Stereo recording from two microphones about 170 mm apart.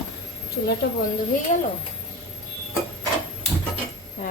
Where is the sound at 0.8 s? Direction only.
85° left.